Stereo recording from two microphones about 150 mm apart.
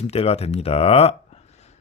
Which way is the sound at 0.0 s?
45° left (ahead or behind).